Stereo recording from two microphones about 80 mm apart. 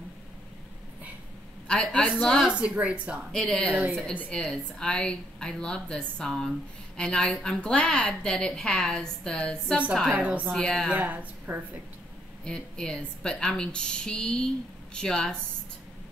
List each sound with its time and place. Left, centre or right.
1.7 s a woman's voice: centre
2.4 s a woman's voice: centre
3.3 s a woman's voice: centre
10.1 s a woman's voice: centre
10.5 s a woman's voice: centre
10.9 s a woman's voice: centre
12.4 s a woman's voice: centre